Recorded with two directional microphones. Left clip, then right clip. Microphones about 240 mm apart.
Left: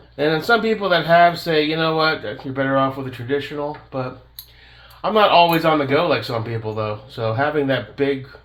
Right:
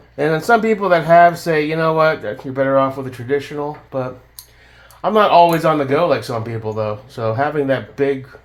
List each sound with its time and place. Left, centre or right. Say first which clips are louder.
0.4 s speech: right 5 dB; right
5.0 s speech: right 3 dB; right